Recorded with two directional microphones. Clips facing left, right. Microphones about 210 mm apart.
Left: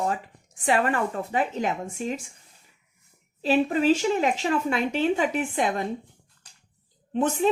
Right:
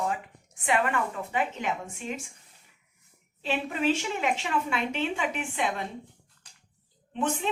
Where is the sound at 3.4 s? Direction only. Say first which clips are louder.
Left 7 dB; 35° left (ahead or behind).